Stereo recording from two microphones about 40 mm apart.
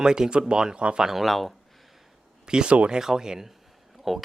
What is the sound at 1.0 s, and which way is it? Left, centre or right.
Speech, centre.